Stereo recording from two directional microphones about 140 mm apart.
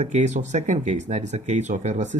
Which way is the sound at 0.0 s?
55° right (ahead or behind).